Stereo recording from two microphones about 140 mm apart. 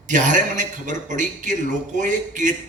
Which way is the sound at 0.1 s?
60° right (ahead or behind).